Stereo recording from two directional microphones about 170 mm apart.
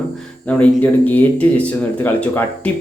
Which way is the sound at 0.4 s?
10° left (ahead or behind).